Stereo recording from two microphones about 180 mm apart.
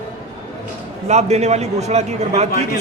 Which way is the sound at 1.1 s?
35° right (ahead or behind).